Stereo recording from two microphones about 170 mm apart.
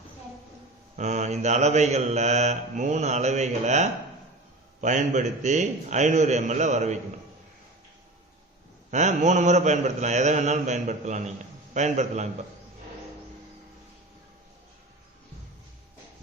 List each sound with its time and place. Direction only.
0.9 s mantra: 45° right (ahead or behind)
8.9 s mantra: 45° right (ahead or behind)